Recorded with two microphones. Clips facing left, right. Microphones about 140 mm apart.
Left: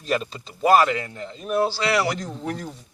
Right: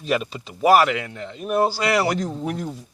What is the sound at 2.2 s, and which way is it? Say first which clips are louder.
Speech: right 4 dB; 10° right (ahead or behind).